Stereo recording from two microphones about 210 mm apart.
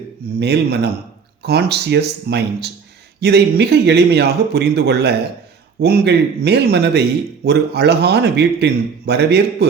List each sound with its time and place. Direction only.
0.3 s a man's voice: 50° right (ahead or behind)